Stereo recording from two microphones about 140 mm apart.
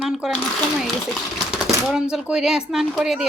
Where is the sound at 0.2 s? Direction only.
5° right (ahead or behind).